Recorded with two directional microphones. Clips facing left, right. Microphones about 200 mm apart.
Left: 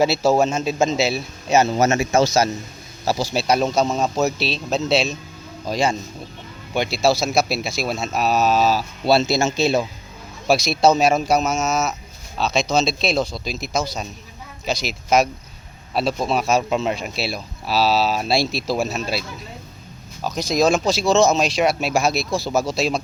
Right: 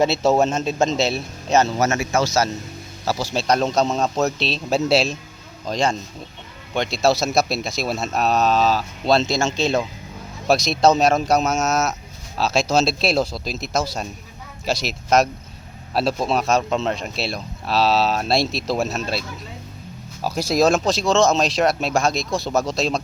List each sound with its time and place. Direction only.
0.0 s speech: centre (ahead or behind)
1.8 s a man's voice: 20° left (ahead or behind); by 19.2 s centre (ahead or behind)
20.2 s speech: 5° right (ahead or behind)